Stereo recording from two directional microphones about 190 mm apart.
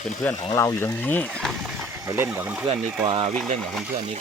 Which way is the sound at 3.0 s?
30° right (ahead or behind).